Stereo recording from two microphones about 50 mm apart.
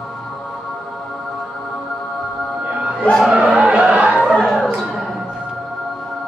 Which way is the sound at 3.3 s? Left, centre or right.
Right.